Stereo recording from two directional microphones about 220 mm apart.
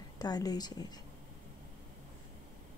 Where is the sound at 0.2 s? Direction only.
15° left (ahead or behind).